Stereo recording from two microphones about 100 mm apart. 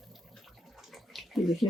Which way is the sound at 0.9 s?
Centre (ahead or behind).